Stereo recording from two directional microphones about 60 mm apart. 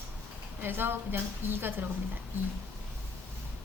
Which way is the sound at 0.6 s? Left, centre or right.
Right.